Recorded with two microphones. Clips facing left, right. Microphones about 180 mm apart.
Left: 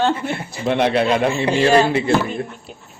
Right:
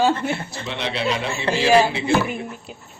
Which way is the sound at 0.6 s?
55° left (ahead or behind).